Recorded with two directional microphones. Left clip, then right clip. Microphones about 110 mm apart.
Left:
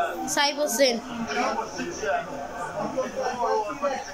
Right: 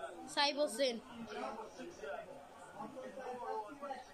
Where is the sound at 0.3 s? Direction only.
20° right (ahead or behind).